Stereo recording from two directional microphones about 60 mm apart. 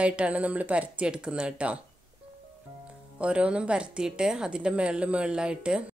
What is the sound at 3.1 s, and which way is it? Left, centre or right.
Speech, right.